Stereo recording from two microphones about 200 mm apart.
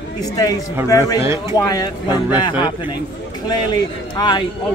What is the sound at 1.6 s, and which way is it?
Speech, 20° left (ahead or behind).